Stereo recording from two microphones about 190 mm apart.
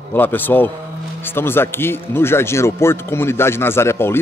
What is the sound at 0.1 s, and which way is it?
Speech, 10° left (ahead or behind).